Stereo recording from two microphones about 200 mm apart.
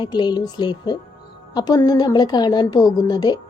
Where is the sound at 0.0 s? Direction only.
20° left (ahead or behind).